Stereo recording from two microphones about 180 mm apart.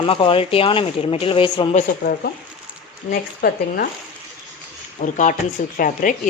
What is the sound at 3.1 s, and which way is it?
Speech, 55° left (ahead or behind).